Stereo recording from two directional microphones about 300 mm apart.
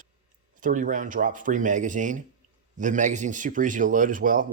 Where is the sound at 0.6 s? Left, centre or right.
Right.